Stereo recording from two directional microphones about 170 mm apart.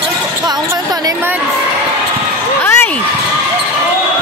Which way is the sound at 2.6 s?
15° left (ahead or behind).